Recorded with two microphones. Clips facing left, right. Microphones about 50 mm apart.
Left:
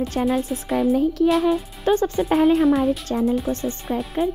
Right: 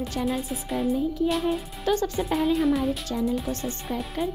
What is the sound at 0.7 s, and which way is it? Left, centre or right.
Speech, left.